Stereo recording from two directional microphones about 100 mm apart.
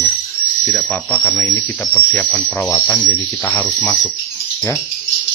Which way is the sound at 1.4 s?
20° left (ahead or behind).